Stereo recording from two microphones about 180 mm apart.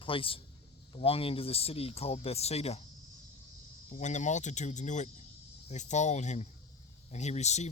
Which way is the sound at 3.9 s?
40° left (ahead or behind).